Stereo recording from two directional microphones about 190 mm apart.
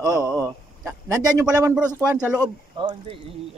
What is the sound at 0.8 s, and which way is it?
Speech, 15° right (ahead or behind).